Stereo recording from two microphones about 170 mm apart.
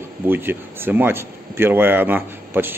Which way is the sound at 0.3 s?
10° right (ahead or behind).